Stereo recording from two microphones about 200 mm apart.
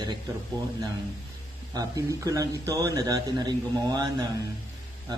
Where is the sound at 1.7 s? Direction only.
15° right (ahead or behind).